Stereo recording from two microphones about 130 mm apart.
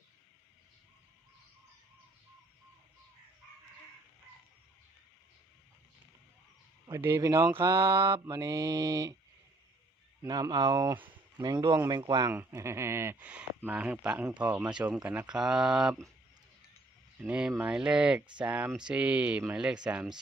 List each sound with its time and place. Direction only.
7.0 s mantra: 20° right (ahead or behind)
10.2 s mantra: 30° right (ahead or behind)
11.4 s speech: 30° right (ahead or behind)
11.9 s mantra: 30° right (ahead or behind)
12.3 s speech: 20° right (ahead or behind); by 16.0 s 5° right (ahead or behind)
17.2 s speech: 10° right (ahead or behind)